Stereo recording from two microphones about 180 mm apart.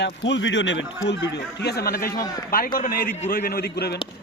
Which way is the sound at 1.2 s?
70° left (ahead or behind).